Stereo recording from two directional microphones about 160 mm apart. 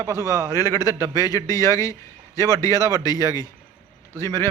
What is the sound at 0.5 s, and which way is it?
Speech, 20° left (ahead or behind).